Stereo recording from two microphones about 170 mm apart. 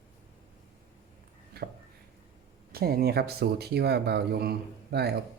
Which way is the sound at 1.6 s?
70° right (ahead or behind).